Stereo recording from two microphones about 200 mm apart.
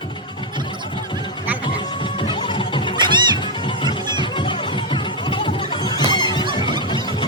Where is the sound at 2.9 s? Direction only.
20° right (ahead or behind).